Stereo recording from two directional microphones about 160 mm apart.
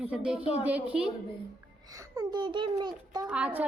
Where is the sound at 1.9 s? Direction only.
20° right (ahead or behind).